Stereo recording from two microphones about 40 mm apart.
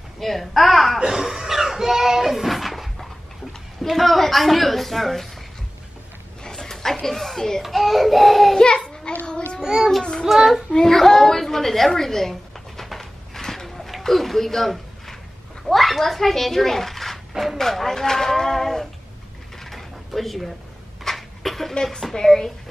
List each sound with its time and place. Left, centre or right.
0.2 s a child's voice: centre
0.9 s a child's voice: centre
6.4 s a child's voice: centre
7.6 s a child's voice: centre
8.5 s a sound: left
9.6 s speech: centre
10.2 s a child's voice: centre
10.7 s a woman's voice: centre
13.4 s a sound: centre
15.7 s a child's voice: centre
19.6 s a sound: centre
22.1 s speech: centre